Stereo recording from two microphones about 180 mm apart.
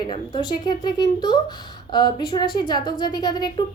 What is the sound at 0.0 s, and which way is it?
Speech, 25° left (ahead or behind).